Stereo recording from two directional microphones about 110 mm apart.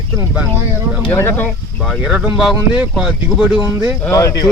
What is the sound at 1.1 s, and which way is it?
Speech, 20° left (ahead or behind).